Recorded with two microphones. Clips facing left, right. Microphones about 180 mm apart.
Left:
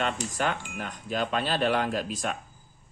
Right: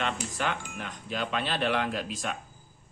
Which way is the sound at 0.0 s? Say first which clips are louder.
Left 3 dB; 45° left (ahead or behind).